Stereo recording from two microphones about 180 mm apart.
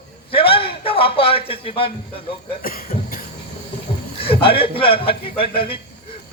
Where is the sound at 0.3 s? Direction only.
30° left (ahead or behind).